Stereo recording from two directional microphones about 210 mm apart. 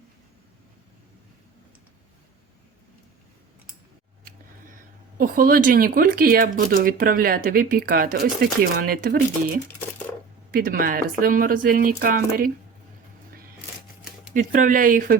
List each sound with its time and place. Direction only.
4.2 s a sound: 40° right (ahead or behind)
5.1 s speech: 40° right (ahead or behind)
10.5 s speech: 40° right (ahead or behind)
14.3 s speech: 40° right (ahead or behind)